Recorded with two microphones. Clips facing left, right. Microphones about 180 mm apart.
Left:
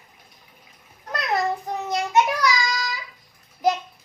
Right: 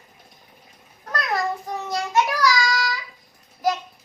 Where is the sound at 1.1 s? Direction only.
20° left (ahead or behind).